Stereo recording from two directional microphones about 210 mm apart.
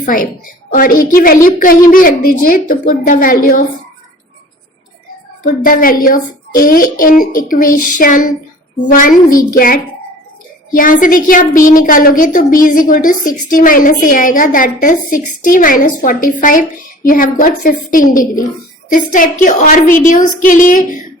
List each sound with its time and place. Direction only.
0.0 s a woman's voice: 40° left (ahead or behind)
5.4 s a woman's voice: 40° left (ahead or behind)